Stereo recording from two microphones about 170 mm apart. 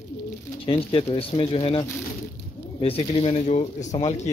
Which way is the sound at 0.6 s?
30° left (ahead or behind).